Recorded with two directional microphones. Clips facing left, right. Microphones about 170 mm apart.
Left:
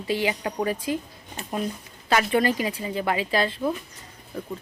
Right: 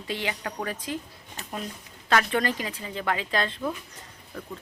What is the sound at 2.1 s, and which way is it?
Speech, 10° left (ahead or behind).